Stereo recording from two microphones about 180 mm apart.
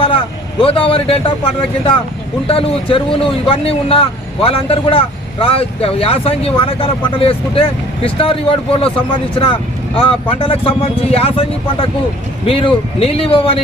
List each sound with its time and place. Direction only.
0.6 s speech: 30° left (ahead or behind)
2.5 s speech: 30° left (ahead or behind)